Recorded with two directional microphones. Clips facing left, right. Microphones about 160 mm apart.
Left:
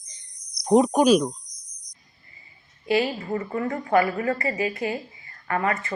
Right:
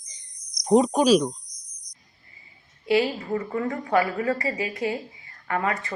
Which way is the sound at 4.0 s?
15° right (ahead or behind).